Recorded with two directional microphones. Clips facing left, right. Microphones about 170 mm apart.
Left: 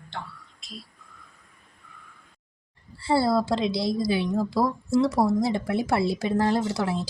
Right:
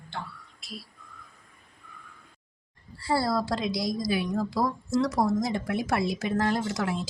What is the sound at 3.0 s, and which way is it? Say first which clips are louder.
Speech: left 4 dB; 25° left (ahead or behind).